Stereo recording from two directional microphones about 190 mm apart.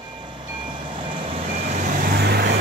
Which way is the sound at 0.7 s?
25° right (ahead or behind).